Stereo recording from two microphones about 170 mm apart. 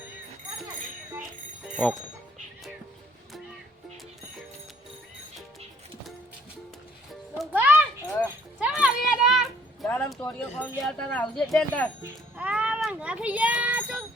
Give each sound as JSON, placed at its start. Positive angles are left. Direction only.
{"t": 7.3, "sound": "music", "side_deg": -10}
{"t": 8.0, "sound": "children playing", "side_deg": 20}
{"t": 8.5, "sound": "a sound", "side_deg": -5}
{"t": 10.2, "sound": "speech", "side_deg": 10}
{"t": 12.0, "sound": "a child's voice", "side_deg": -5}